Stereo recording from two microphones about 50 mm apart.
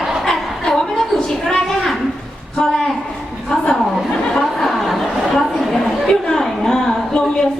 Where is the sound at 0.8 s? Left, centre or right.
Centre.